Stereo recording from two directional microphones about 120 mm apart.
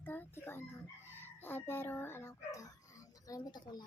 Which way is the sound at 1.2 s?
20° left (ahead or behind).